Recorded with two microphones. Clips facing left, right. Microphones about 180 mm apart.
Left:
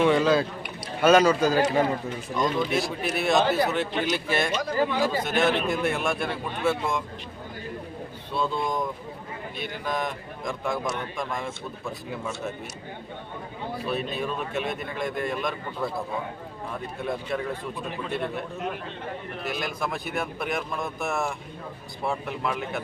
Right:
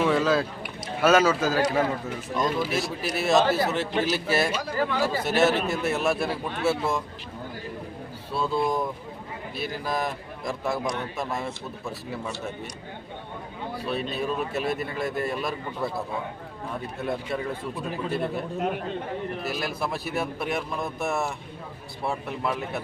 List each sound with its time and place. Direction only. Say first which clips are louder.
0.0 s a man's voice: left 2 dB; centre (ahead or behind)
4.8 s speech: left 1 dB; 15° left (ahead or behind)
5.2 s a man's voice: right 2 dB; 5° right (ahead or behind)
8.3 s a man's voice: right 2 dB; 5° right (ahead or behind)
14.2 s a man's voice: right 1 dB; 5° right (ahead or behind)
17.1 s a man's voice: even; centre (ahead or behind)
19.4 s a man's voice: right 1 dB; 5° right (ahead or behind)